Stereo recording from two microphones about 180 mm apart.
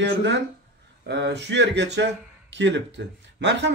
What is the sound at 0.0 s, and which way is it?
Speech, 80° right.